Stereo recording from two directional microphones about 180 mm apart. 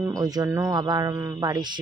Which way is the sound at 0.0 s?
20° right (ahead or behind).